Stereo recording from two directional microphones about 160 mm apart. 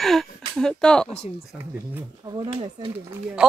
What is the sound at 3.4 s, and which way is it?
Speech, 5° right (ahead or behind).